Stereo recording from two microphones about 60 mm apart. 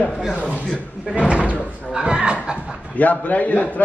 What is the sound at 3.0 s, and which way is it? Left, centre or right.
Speech, left.